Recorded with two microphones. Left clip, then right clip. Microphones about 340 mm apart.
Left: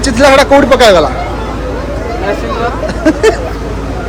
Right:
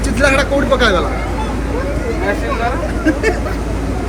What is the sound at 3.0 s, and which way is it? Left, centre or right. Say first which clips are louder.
Vehicle: left 8 dB; centre.